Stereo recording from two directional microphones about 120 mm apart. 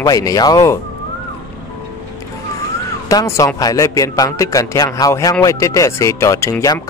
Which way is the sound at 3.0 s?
25° left (ahead or behind).